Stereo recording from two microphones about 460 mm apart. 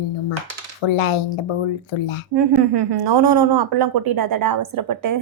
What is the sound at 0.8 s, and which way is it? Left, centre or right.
Speech, left.